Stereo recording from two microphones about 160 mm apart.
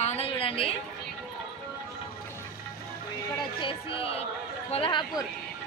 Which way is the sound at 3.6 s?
35° left (ahead or behind).